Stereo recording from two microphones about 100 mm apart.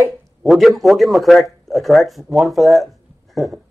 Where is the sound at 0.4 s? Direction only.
Centre (ahead or behind).